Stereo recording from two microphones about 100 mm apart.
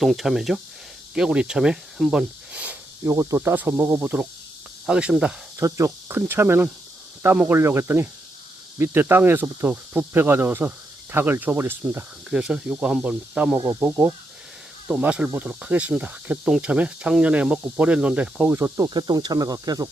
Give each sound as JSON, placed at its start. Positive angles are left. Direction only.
{"t": 0.0, "sound": "speech", "side_deg": 0}
{"t": 3.0, "sound": "speech", "side_deg": -35}
{"t": 3.3, "sound": "speech", "side_deg": -20}
{"t": 5.5, "sound": "speech", "side_deg": -30}
{"t": 12.3, "sound": "speech", "side_deg": -5}
{"t": 18.8, "sound": "speech", "side_deg": -45}